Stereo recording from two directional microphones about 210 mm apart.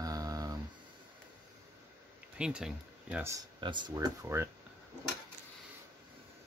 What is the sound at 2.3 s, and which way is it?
Speech, 5° right (ahead or behind).